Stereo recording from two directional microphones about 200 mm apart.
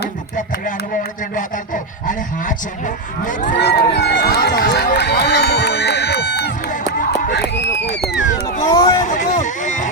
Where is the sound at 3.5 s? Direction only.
55° left (ahead or behind).